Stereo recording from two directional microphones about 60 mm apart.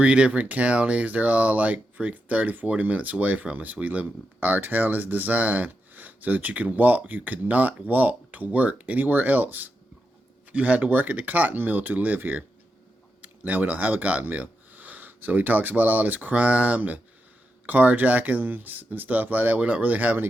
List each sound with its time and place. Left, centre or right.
0.0 s speech: centre